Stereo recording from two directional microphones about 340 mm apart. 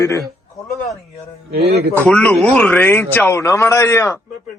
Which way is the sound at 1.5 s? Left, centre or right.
Right.